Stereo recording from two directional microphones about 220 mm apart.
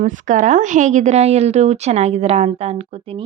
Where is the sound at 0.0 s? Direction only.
35° right (ahead or behind).